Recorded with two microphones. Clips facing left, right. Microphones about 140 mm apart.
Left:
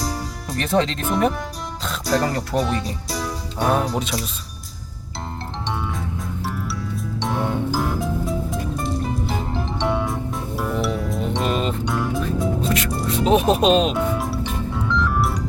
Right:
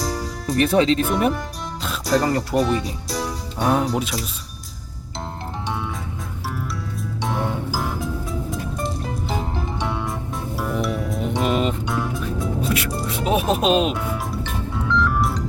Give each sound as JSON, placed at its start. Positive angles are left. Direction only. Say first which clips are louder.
{"t": 0.0, "sound": "speech", "louder": "right 2 dB", "side_deg": 0}
{"t": 7.2, "sound": "music", "louder": "left 2 dB", "side_deg": 0}
{"t": 9.7, "sound": "music", "louder": "left 6 dB", "side_deg": 0}
{"t": 11.2, "sound": "music", "louder": "right 3 dB", "side_deg": -15}
{"t": 11.9, "sound": "music", "louder": "left 2 dB", "side_deg": 0}
{"t": 12.6, "sound": "music", "louder": "left 1 dB", "side_deg": -10}